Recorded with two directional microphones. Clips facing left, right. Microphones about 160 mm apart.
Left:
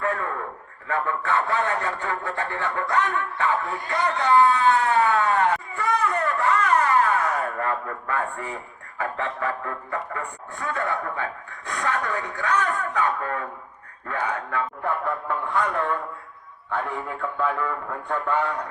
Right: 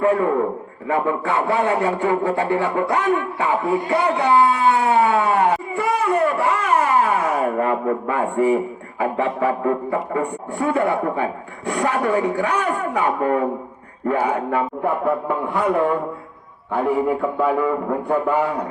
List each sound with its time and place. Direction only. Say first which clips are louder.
0.0 s a man's voice: right 10 dB; 15° right (ahead or behind)
17.2 s speech: right 8 dB; 30° right (ahead or behind)
17.4 s speech: right 6 dB; 10° right (ahead or behind)
17.7 s a man's voice: right 9 dB; 25° right (ahead or behind)
18.1 s speech: right 5 dB; 10° right (ahead or behind)